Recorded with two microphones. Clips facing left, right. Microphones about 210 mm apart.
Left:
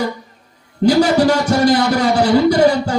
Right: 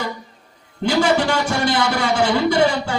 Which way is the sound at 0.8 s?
40° left (ahead or behind).